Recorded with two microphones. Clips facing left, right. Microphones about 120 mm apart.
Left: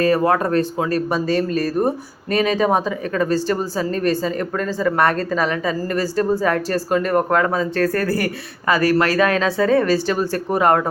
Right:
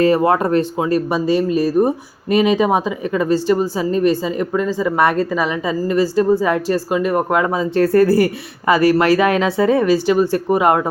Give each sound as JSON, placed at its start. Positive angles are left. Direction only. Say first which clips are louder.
{"t": 0.0, "sound": "speech", "louder": "right 3 dB", "side_deg": -25}